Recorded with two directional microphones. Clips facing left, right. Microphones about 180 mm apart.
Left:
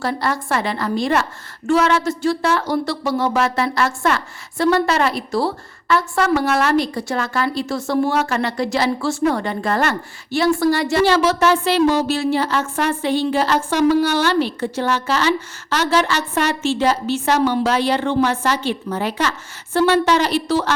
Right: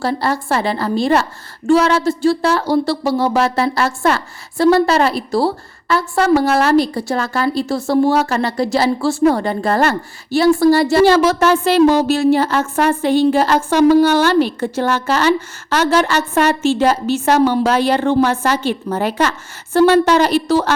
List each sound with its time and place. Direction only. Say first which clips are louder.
0.0 s a woman's voice: right 3 dB; 30° right (ahead or behind)